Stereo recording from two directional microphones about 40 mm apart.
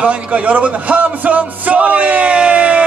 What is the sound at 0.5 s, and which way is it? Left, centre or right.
Speech, right.